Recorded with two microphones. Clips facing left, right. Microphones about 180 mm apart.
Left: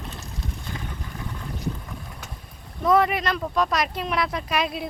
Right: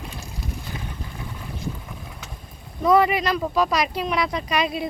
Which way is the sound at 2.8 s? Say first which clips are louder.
Right 2 dB; centre (ahead or behind).